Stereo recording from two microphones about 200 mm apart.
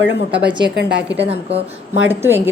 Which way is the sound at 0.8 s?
60° right (ahead or behind).